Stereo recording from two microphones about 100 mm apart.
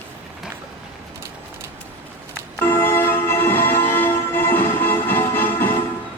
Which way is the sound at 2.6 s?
25° left (ahead or behind).